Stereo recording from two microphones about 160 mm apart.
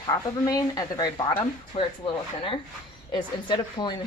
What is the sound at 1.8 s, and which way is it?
Speech, 40° left (ahead or behind).